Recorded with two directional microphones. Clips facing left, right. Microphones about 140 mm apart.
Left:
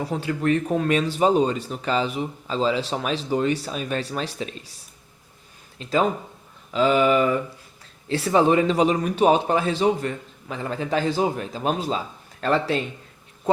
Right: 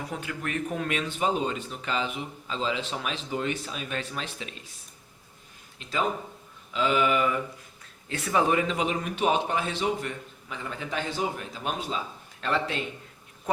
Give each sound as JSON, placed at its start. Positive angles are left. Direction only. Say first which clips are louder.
{"t": 0.0, "sound": "speech", "louder": "left 9 dB", "side_deg": 30}
{"t": 5.8, "sound": "speech", "louder": "left 7 dB", "side_deg": 35}